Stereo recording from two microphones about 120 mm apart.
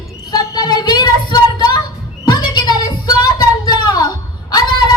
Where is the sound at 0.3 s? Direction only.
35° left (ahead or behind).